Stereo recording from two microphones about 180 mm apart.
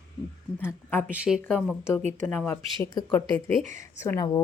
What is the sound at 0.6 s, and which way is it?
A woman's voice, 10° left (ahead or behind).